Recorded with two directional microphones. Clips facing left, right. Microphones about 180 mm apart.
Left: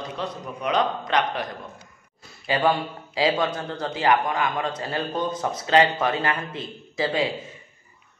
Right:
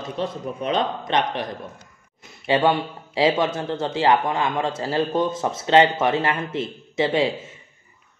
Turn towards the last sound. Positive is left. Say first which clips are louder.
# right 4 dB
turn(degrees=-25)  # may be behind; listen again after turning